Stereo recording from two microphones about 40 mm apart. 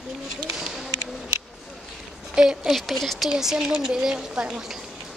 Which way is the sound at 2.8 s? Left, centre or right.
Centre.